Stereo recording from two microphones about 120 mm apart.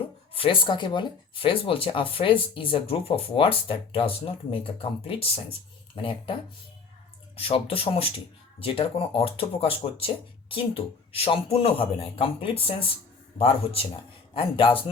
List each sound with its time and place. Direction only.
0.3 s speech: 45° left (ahead or behind)
7.3 s speech: 50° left (ahead or behind)
11.1 s speech: 55° left (ahead or behind)